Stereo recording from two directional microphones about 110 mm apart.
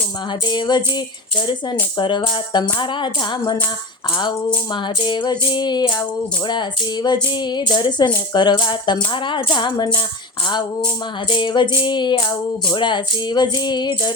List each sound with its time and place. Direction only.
0.4 s music: 40° left (ahead or behind)